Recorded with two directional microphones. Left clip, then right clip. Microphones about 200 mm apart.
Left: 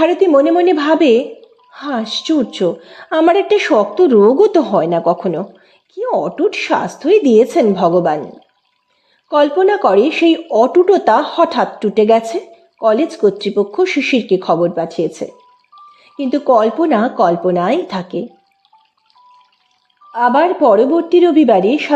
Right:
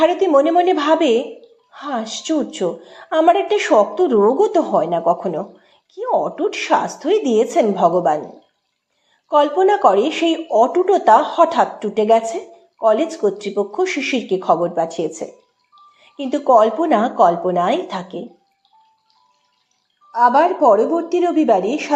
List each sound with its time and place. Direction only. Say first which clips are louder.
0.0 s speech: left 3 dB; 35° left (ahead or behind)
9.3 s speech: left 2 dB; 45° left (ahead or behind)
15.7 s music: left 7 dB; 30° left (ahead or behind)
16.1 s speech: left 1 dB; 40° left (ahead or behind)
20.1 s speech: left 1 dB; 40° left (ahead or behind)